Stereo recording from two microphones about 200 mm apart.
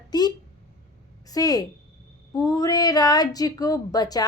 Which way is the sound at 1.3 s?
20° left (ahead or behind).